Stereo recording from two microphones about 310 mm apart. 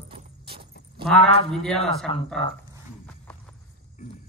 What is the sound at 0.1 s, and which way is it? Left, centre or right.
Keys jangling, right.